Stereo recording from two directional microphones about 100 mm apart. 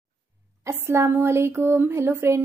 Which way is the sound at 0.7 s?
30° right (ahead or behind).